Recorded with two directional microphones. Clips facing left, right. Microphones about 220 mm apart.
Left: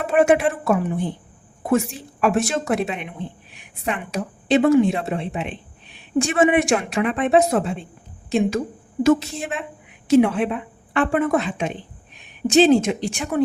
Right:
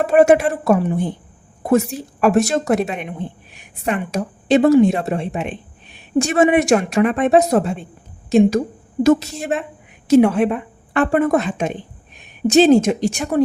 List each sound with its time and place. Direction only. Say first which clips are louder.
0.1 s a woman's voice: right 3 dB; 40° right (ahead or behind)